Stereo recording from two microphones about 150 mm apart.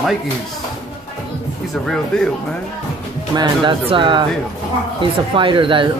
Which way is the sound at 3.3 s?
30° right (ahead or behind).